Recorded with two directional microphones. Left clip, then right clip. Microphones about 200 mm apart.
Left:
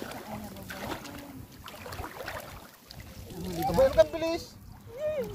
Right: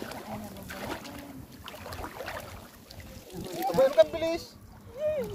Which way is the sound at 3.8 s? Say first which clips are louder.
Right 1 dB; 20° left (ahead or behind).